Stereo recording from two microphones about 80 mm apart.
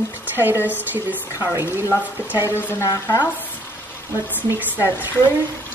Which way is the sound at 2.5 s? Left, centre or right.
Left.